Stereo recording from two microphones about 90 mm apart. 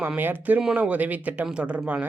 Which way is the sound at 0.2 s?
20° right (ahead or behind).